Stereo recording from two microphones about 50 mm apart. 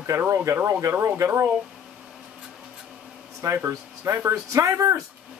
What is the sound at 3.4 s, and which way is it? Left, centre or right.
Speech, right.